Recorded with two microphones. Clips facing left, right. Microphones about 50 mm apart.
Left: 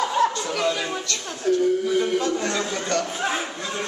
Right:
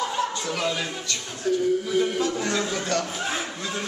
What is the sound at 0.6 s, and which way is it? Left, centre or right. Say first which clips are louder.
A man's voice: left 4 dB; centre.